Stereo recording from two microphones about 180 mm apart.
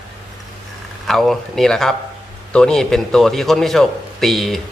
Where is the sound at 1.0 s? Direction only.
Centre (ahead or behind).